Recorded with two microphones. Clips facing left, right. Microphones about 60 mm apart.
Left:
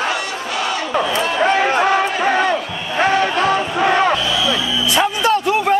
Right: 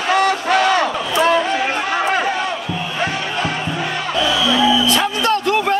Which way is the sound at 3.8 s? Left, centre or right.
Left.